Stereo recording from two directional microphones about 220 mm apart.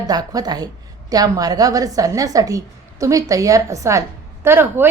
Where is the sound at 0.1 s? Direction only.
15° right (ahead or behind).